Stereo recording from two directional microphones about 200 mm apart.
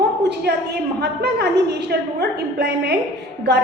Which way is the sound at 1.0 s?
55° right (ahead or behind).